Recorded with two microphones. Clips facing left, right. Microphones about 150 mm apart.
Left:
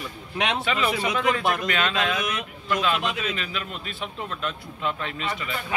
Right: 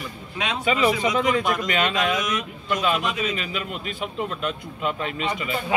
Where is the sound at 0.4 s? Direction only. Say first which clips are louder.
Left 2 dB; 80° left.